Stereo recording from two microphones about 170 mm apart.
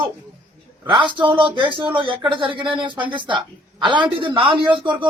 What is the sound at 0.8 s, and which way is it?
Speech, 30° right (ahead or behind).